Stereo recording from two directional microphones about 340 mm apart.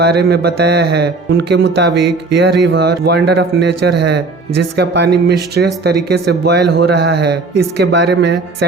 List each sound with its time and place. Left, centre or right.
0.0 s speech: right
2.3 s music: right
2.7 s speech: right